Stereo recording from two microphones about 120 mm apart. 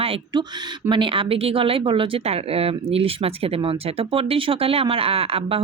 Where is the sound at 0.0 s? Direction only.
50° right (ahead or behind).